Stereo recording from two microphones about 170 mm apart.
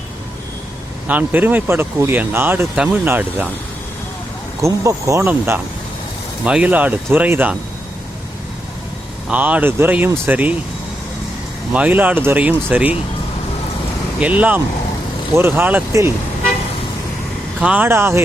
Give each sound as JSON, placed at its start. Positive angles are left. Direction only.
{"t": 1.0, "sound": "speech", "side_deg": -10}
{"t": 4.6, "sound": "speech", "side_deg": -15}
{"t": 9.3, "sound": "speech", "side_deg": -10}
{"t": 11.7, "sound": "speech", "side_deg": -10}
{"t": 14.2, "sound": "speech", "side_deg": -10}
{"t": 17.6, "sound": "speech", "side_deg": -10}